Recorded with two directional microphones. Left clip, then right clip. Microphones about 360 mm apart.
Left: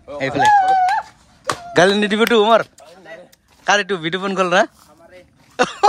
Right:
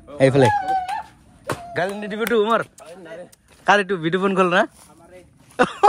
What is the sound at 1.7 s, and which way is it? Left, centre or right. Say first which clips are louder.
Speech: left 12 dB; left.